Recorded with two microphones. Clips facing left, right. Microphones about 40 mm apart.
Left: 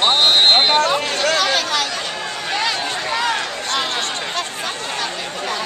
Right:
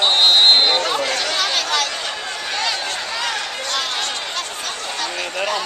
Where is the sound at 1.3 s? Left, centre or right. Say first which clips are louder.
Left 2 dB; centre.